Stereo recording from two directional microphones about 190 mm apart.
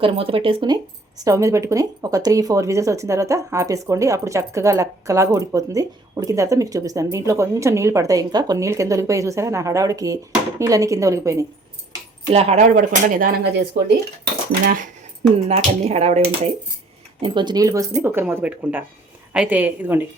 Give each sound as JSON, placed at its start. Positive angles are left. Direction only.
{"t": 0.0, "sound": "speech", "side_deg": -30}
{"t": 12.2, "sound": "speech", "side_deg": -30}
{"t": 15.4, "sound": "speech", "side_deg": -35}
{"t": 17.2, "sound": "speech", "side_deg": -25}